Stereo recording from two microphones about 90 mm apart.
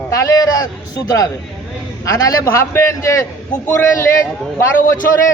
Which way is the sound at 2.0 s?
40° left (ahead or behind).